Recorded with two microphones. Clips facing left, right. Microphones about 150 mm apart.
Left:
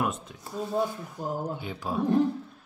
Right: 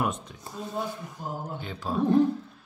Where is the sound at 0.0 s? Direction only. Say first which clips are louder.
Even; 5° left (ahead or behind).